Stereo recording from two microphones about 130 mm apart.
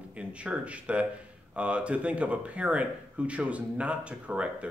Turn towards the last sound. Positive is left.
turn(degrees=-10)  # may be behind; listen again after turning